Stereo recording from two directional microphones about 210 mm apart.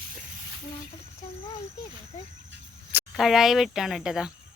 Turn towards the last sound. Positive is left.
turn(degrees=-5)  # may be behind; listen again after turning